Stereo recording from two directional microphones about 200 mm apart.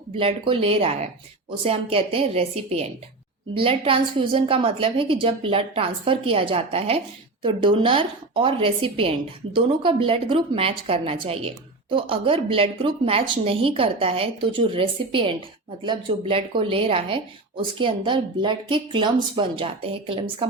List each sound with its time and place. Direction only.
0.2 s speech: 25° right (ahead or behind)